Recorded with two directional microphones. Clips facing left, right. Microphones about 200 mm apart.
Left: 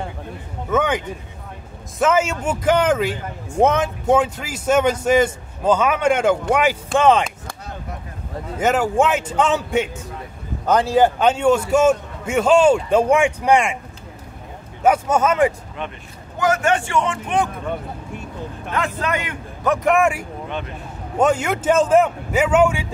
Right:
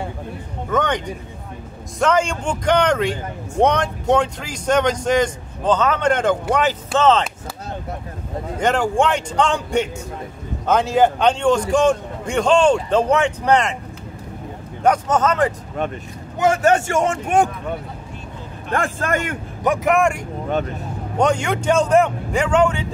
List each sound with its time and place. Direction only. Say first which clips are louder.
0.7 s speech: left 1 dB; 5° left (ahead or behind)
8.5 s speech: left 1 dB; 5° left (ahead or behind)
14.8 s speech: even; 10° left (ahead or behind)
15.8 s a man's voice: right 6 dB; 45° right (ahead or behind)
16.3 s a man's voice: right 3 dB; 30° right (ahead or behind); by 17.5 s 45° right (ahead or behind)
18.7 s a man's voice: right 2 dB; 50° right (ahead or behind)
19.8 s speech: left 1 dB; centre (ahead or behind)
20.4 s a man's voice: right 8 dB; 45° right (ahead or behind)
21.2 s speech: left 1 dB; 5° left (ahead or behind)